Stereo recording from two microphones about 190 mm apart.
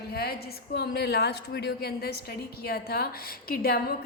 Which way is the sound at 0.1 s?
55° left (ahead or behind).